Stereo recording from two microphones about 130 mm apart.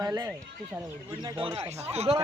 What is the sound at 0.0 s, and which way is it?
Speech, 25° right (ahead or behind).